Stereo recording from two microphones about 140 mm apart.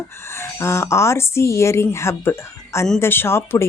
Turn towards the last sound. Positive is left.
turn(degrees=15)  # may be behind; listen again after turning